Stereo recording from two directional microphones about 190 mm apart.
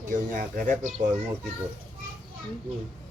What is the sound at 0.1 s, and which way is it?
Speech, 45° right (ahead or behind).